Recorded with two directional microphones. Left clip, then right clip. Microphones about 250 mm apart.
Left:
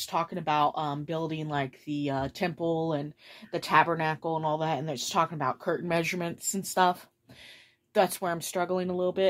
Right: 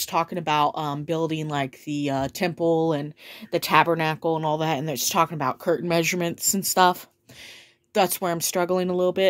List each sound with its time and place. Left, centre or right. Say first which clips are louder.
0.0 s speech: right 5 dB; right